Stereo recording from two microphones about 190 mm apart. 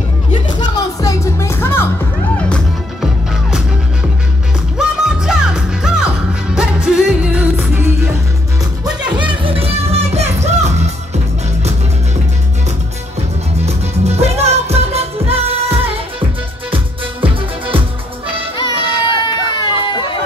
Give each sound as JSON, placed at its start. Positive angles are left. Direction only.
{"t": 0.3, "sound": "music", "side_deg": 25}
{"t": 4.7, "sound": "music", "side_deg": -5}
{"t": 9.4, "sound": "music", "side_deg": -30}
{"t": 13.6, "sound": "music", "side_deg": -35}
{"t": 16.7, "sound": "music", "side_deg": -25}
{"t": 18.6, "sound": "a sound", "side_deg": 25}